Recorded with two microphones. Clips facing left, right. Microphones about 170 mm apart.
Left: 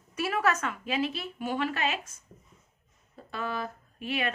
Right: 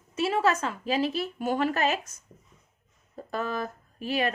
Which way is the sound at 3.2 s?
45° right (ahead or behind).